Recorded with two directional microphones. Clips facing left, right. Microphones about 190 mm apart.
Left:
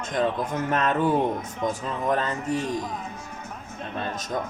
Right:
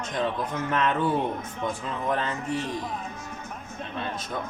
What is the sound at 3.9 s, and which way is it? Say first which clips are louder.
Music: left 3 dB; 45° left (ahead or behind).